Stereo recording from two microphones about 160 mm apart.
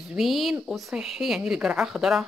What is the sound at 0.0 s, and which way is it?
A woman's voice, centre (ahead or behind).